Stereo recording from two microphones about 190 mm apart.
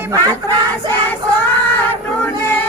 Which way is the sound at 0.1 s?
20° right (ahead or behind).